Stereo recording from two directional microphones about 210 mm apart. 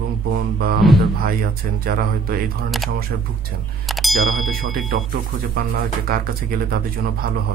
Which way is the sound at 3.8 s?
Centre (ahead or behind).